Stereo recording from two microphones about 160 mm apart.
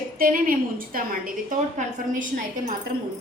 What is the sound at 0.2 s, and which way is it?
A woman's voice, 60° right (ahead or behind).